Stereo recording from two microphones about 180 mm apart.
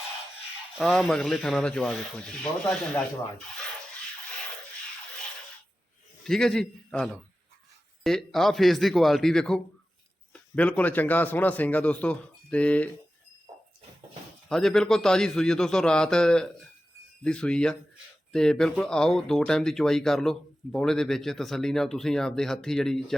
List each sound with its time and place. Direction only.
0.8 s speech: centre (ahead or behind)
6.2 s a man's voice: centre (ahead or behind)
14.5 s speech: centre (ahead or behind)